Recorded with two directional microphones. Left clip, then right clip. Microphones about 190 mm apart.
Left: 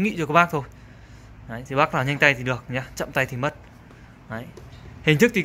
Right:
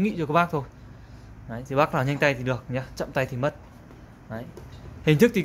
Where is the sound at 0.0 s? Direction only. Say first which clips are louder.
Left 4 dB; centre (ahead or behind).